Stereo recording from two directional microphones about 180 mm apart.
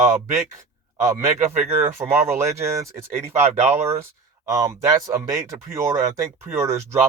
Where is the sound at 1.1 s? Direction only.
40° right (ahead or behind).